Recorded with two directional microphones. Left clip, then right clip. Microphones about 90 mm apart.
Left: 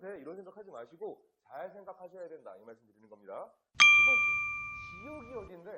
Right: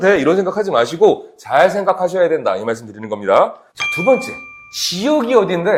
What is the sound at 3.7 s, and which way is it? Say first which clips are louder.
Ding: right 6 dB; centre (ahead or behind).